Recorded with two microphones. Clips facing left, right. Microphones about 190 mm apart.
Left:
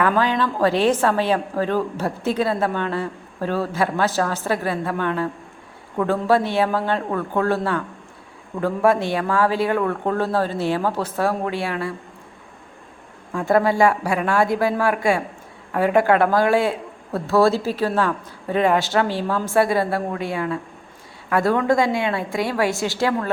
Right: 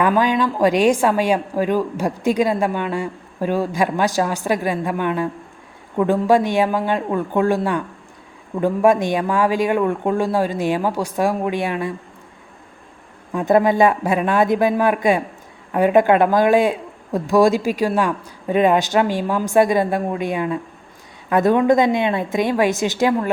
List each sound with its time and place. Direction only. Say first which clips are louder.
0.0 s a woman's voice: right 2 dB; 15° right (ahead or behind)
13.3 s a woman's voice: right 3 dB; 20° right (ahead or behind)